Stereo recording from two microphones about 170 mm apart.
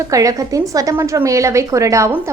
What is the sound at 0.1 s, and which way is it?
A woman's voice, 20° right (ahead or behind).